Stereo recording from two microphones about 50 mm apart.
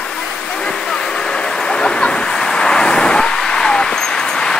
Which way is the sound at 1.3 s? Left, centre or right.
Centre.